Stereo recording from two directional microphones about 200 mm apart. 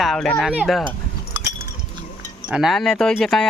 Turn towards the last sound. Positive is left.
turn(degrees=0)  # may be behind; listen again after turning